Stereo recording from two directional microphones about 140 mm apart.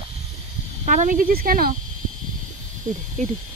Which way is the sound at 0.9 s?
70° right (ahead or behind).